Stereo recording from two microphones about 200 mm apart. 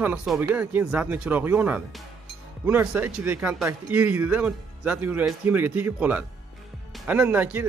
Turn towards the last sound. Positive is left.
turn(degrees=-10)  # may be behind; listen again after turning